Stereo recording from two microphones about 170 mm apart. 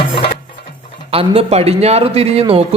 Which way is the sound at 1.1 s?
35° right (ahead or behind).